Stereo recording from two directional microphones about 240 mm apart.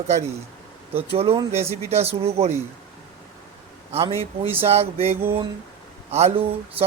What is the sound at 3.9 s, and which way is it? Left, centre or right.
Speech, right.